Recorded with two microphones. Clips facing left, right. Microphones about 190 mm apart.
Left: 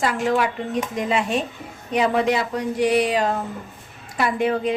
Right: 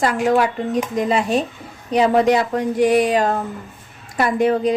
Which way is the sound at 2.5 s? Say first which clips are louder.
Right 4 dB; 50° right (ahead or behind).